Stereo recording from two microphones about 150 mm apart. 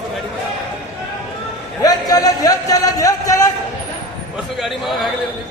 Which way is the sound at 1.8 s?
25° left (ahead or behind).